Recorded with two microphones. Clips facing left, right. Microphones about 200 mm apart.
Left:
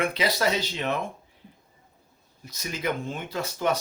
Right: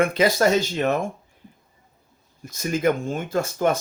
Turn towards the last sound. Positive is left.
turn(degrees=-50)  # may be behind; listen again after turning